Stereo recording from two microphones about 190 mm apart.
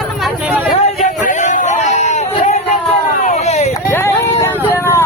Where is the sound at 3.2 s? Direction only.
35° left (ahead or behind).